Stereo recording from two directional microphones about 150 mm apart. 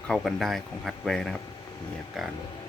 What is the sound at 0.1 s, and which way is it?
Speech, centre (ahead or behind).